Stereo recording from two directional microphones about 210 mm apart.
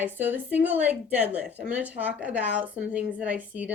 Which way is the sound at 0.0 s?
10° right (ahead or behind).